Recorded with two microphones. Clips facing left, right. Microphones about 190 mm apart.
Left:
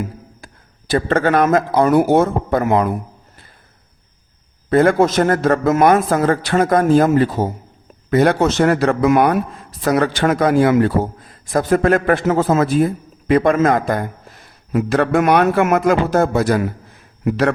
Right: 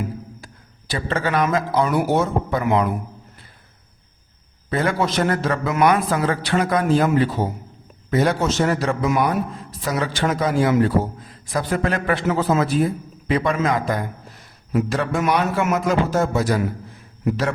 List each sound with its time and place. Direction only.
0.4 s speech: 55° left (ahead or behind)
4.7 s a man's voice: 50° left (ahead or behind)
8.1 s a man's voice: 60° left (ahead or behind)
11.5 s a man's voice: 50° left (ahead or behind)